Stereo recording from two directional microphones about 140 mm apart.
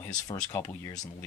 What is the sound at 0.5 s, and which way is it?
Speech, 15° left (ahead or behind).